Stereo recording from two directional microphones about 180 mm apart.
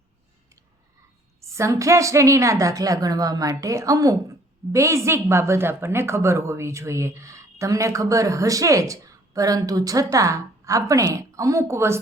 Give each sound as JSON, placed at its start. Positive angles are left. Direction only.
{"t": 1.4, "sound": "a woman's voice", "side_deg": -15}